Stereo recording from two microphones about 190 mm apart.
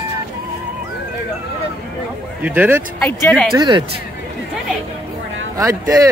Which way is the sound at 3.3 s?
5° left (ahead or behind).